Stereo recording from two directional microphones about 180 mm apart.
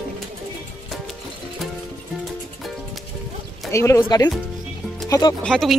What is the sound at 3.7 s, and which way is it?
Speech, 15° left (ahead or behind).